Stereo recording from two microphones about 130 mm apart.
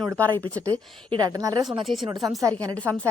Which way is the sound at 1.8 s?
Centre (ahead or behind).